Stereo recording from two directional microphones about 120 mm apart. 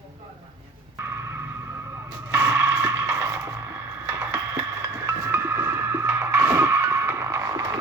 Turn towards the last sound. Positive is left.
turn(degrees=-30)  # may be behind; listen again after turning